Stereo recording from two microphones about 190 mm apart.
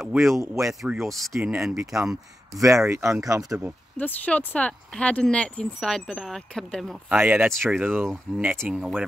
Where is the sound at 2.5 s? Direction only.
15° right (ahead or behind).